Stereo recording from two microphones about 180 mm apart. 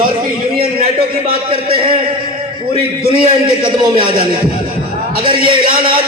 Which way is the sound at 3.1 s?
30° right (ahead or behind).